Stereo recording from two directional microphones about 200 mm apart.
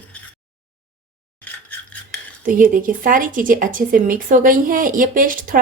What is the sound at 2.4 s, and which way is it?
Speech, 45° right (ahead or behind).